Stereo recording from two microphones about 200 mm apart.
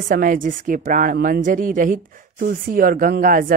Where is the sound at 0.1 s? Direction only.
45° right (ahead or behind).